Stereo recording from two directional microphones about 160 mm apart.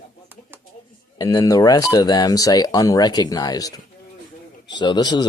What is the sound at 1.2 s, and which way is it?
Speech, 20° left (ahead or behind).